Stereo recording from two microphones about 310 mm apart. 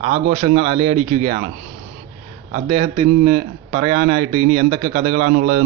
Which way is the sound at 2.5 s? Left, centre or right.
Centre.